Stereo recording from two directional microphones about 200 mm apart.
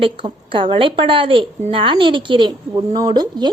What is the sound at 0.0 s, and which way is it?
A woman's voice, 25° right (ahead or behind).